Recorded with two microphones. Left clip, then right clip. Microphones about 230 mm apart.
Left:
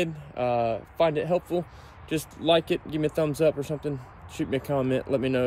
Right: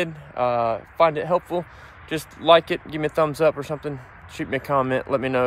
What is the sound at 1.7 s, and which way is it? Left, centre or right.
Speech, centre.